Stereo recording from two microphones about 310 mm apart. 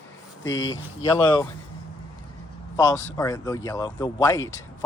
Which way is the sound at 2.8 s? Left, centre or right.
Centre.